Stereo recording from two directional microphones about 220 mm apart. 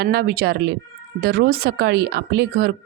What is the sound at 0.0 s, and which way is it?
Speech, 45° right (ahead or behind).